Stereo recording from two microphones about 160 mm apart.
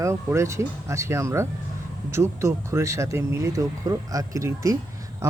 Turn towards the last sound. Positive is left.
turn(degrees=-20)  # may be behind; listen again after turning